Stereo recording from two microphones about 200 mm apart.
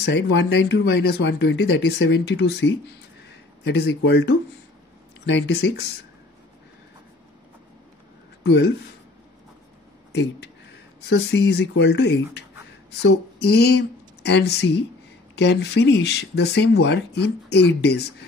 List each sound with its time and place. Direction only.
0.0 s speech: 55° left (ahead or behind)
8.5 s speech: 60° left (ahead or behind)
11.1 s speech: 55° left (ahead or behind)